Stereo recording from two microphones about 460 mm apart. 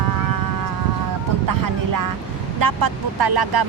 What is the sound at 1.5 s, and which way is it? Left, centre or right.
Speech, right.